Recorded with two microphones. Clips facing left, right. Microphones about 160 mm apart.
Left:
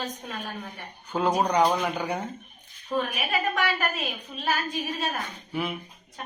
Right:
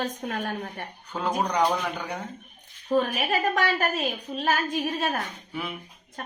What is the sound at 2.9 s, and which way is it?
A woman's voice, 40° right (ahead or behind).